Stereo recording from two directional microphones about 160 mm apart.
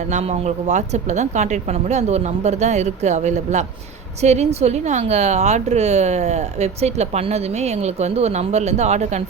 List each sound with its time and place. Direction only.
0.1 s a woman's voice: 45° right (ahead or behind)